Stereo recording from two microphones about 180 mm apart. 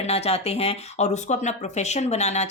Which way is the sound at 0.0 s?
35° left (ahead or behind).